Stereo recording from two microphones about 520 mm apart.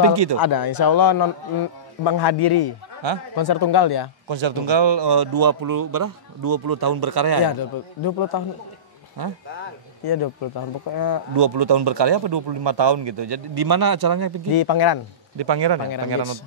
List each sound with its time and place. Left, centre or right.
0.0 s speech: right
0.4 s a man's voice: left
3.0 s speech: right
3.3 s speech: left
4.3 s speech: right
8.0 s speech: left
10.0 s speech: left
11.3 s speech: right
14.5 s speech: left
15.3 s speech: right